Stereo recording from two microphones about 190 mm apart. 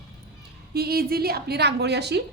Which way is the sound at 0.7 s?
55° right (ahead or behind).